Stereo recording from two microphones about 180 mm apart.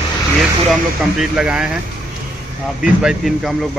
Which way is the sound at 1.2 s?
5° right (ahead or behind).